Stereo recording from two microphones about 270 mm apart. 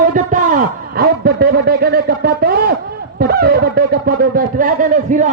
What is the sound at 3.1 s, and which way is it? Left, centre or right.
A man's voice, right.